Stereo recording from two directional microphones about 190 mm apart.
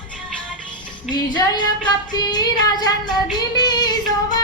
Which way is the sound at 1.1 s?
Centre (ahead or behind).